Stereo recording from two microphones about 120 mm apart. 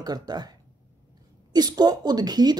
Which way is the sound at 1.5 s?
35° right (ahead or behind).